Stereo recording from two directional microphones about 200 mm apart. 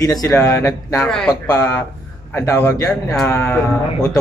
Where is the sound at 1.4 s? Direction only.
15° left (ahead or behind).